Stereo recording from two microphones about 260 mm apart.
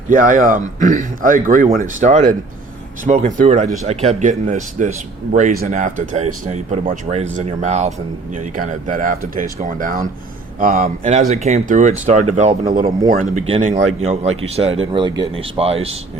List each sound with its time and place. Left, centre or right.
0.1 s speech: right